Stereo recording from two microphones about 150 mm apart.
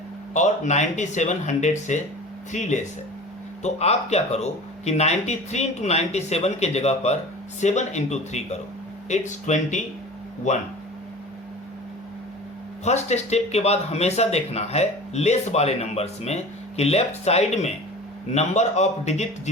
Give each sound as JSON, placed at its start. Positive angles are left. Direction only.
{"t": 0.3, "sound": "speech", "side_deg": 55}
{"t": 12.8, "sound": "speech", "side_deg": 50}